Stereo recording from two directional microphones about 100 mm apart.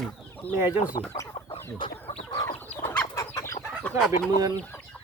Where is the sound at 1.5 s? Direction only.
75° left (ahead or behind).